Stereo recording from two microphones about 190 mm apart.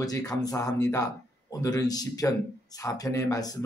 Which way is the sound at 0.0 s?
20° left (ahead or behind).